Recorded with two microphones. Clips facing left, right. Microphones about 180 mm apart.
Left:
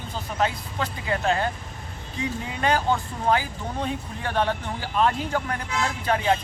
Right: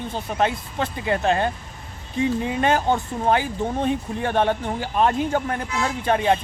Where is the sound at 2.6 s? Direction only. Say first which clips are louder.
Right 1 dB; 25° right (ahead or behind).